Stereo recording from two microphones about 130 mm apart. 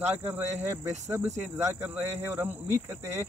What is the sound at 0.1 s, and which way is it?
Speech, 15° right (ahead or behind).